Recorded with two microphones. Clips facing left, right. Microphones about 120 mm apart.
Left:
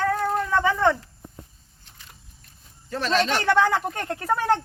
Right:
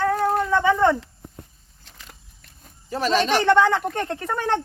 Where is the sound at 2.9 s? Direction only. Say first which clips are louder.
Right 2 dB; 10° right (ahead or behind).